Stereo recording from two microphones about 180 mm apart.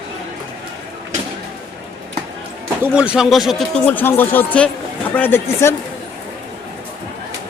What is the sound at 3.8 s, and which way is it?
Speech, 10° left (ahead or behind).